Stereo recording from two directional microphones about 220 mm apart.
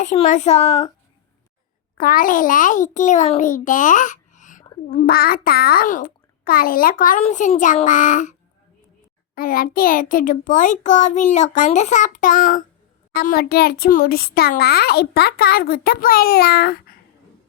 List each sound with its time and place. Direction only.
0.0 s a child's voice: 35° left (ahead or behind)
2.0 s a child's voice: 40° left (ahead or behind)